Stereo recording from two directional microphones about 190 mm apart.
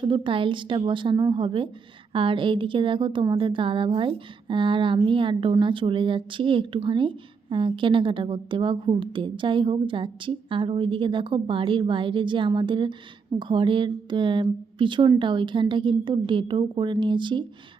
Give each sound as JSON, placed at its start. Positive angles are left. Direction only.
{"t": 0.0, "sound": "speech", "side_deg": -25}